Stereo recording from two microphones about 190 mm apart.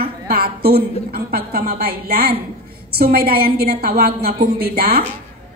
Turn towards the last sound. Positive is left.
turn(degrees=-55)  # may be behind; listen again after turning